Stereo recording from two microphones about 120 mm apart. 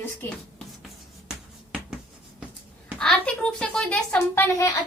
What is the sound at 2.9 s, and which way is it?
A woman's voice, 5° left (ahead or behind).